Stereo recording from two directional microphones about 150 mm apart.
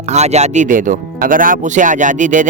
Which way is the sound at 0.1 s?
50° right (ahead or behind).